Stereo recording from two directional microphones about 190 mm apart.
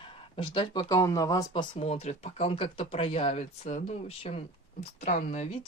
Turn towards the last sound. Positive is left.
turn(degrees=35)  # may be behind; listen again after turning